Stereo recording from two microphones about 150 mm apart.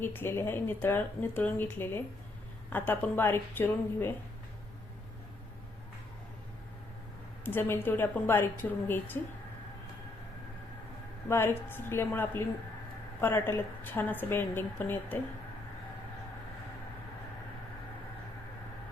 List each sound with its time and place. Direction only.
0.0 s speech: 15° left (ahead or behind)
7.4 s speech: 15° left (ahead or behind)
11.3 s speech: 15° left (ahead or behind)